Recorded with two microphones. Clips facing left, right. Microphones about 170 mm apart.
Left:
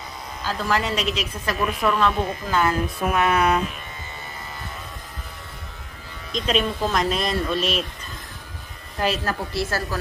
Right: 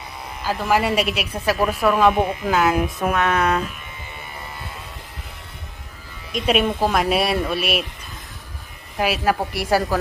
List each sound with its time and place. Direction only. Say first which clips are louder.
0.4 s a woman's voice: right 4 dB; 10° right (ahead or behind)
3.2 s a sound: left 1 dB; 10° left (ahead or behind)
6.3 s a woman's voice: right 3 dB; 10° right (ahead or behind)
9.0 s a woman's voice: right 4 dB; 10° right (ahead or behind)